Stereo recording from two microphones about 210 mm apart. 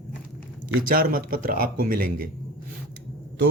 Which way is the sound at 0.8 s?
45° right (ahead or behind).